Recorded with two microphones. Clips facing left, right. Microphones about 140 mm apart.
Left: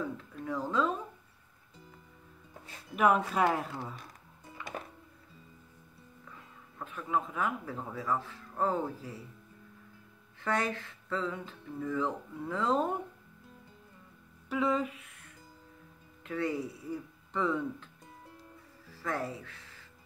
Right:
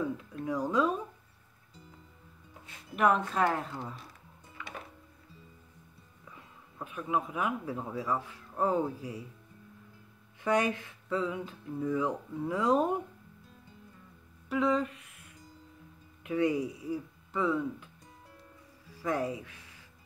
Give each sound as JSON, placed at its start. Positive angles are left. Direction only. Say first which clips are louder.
{"t": 0.0, "sound": "speech", "louder": "right 3 dB", "side_deg": -15}
{"t": 3.0, "sound": "speech", "louder": "even", "side_deg": 5}
{"t": 6.3, "sound": "speech", "louder": "right 2 dB", "side_deg": -15}
{"t": 10.4, "sound": "speech", "louder": "right 4 dB", "side_deg": -15}
{"t": 14.5, "sound": "speech", "louder": "right 2 dB", "side_deg": 0}
{"t": 16.3, "sound": "speech", "louder": "right 5 dB", "side_deg": -15}
{"t": 18.9, "sound": "speech", "louder": "right 4 dB", "side_deg": -15}